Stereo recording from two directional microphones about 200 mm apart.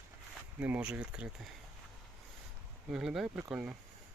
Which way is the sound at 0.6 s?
5° right (ahead or behind).